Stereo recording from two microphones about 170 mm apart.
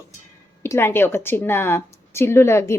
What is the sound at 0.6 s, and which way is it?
Speech, 15° left (ahead or behind).